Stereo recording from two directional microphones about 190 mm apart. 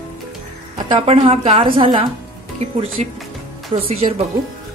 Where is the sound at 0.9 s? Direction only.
30° right (ahead or behind).